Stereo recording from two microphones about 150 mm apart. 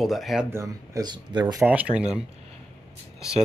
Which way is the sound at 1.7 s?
10° right (ahead or behind).